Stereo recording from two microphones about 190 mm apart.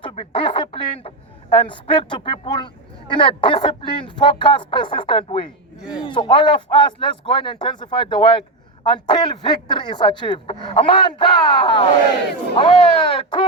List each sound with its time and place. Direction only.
0.0 s speech: 25° left (ahead or behind)
5.8 s a man's voice: 5° right (ahead or behind)
6.1 s speech: 25° left (ahead or behind)